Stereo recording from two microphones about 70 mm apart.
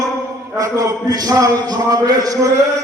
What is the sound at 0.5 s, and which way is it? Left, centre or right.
A man's voice, right.